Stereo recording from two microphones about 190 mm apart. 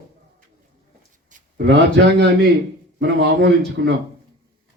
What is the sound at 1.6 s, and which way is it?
A man's voice, 65° right (ahead or behind).